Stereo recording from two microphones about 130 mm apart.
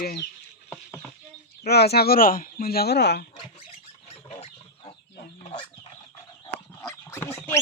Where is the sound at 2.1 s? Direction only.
90° left.